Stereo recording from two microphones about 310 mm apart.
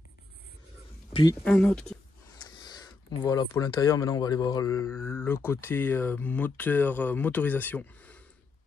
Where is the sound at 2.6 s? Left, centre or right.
Centre.